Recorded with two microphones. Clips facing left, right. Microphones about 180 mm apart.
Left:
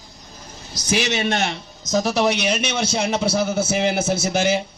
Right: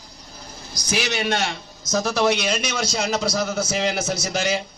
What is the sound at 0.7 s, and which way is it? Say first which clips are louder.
A man's voice: left 3 dB; 20° left (ahead or behind).